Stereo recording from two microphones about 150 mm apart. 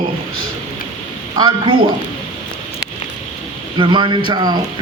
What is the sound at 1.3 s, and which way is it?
Speech, 30° right (ahead or behind).